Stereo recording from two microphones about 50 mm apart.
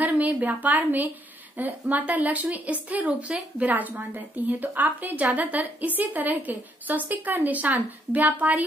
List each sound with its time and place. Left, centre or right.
0.2 s a woman's voice: right